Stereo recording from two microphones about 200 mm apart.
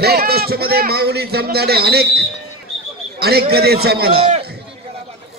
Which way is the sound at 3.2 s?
50° right (ahead or behind).